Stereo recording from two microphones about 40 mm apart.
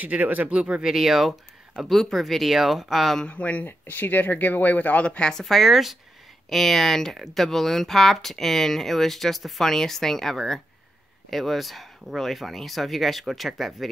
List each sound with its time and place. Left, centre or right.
0.0 s speech: right
0.5 s speech: right
0.8 s speech: centre
1.9 s speech: centre
3.3 s speech: left
3.6 s speech: left
5.2 s speech: centre
5.6 s speech: centre